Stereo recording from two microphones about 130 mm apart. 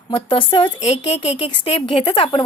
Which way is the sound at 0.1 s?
40° left (ahead or behind).